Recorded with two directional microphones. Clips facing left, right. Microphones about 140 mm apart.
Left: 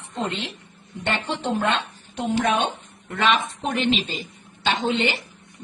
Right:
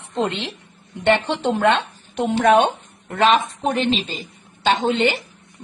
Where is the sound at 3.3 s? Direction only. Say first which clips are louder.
Right 2 dB; 35° right (ahead or behind).